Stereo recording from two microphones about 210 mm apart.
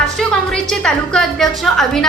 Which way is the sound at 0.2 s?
5° left (ahead or behind).